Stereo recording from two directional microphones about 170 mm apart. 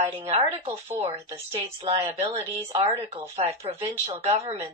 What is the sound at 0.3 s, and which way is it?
A woman's voice, 40° right (ahead or behind).